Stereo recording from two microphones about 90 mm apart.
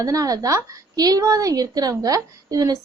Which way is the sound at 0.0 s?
40° right (ahead or behind).